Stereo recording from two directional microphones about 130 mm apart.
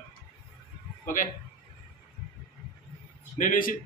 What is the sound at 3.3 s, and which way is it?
Speech, 90° left.